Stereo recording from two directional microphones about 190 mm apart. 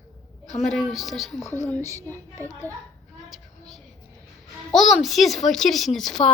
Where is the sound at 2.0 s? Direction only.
10° left (ahead or behind).